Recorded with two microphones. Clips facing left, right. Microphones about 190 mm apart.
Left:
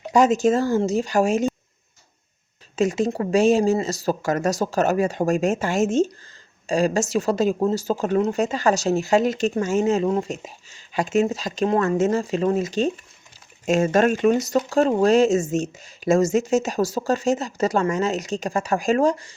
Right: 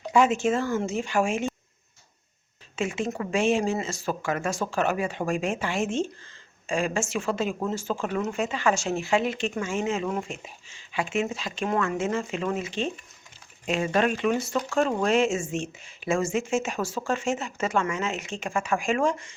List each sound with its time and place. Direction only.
0.1 s speech: 40° left (ahead or behind)
2.7 s speech: 40° left (ahead or behind)